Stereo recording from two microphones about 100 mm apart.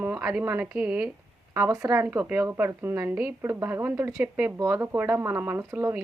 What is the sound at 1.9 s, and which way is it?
Speech, 20° right (ahead or behind).